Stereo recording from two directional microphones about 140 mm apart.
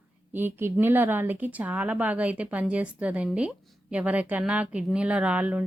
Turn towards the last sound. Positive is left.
turn(degrees=-10)  # may be behind; listen again after turning